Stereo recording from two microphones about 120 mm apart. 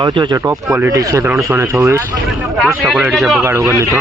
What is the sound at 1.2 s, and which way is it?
Speech, 20° right (ahead or behind).